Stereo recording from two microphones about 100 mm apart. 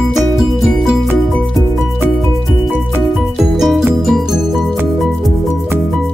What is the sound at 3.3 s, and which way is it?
Music, centre (ahead or behind).